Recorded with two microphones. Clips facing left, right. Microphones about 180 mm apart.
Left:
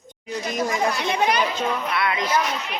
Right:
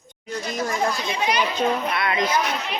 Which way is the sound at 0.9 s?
60° left (ahead or behind).